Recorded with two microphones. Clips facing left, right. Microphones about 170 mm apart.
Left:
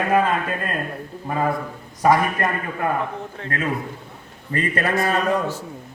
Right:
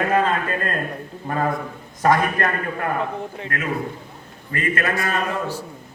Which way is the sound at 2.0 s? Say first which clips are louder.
Left 1 dB; 10° left (ahead or behind).